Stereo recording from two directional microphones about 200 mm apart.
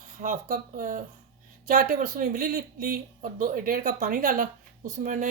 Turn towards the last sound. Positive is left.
turn(degrees=-40)  # may be behind; listen again after turning